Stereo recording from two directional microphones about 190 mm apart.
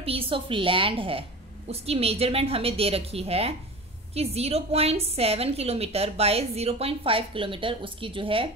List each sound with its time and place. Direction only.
0.0 s a woman's voice: 30° right (ahead or behind)